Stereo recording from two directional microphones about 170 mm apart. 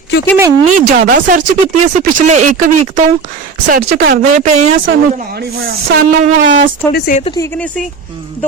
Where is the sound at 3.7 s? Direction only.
55° right (ahead or behind).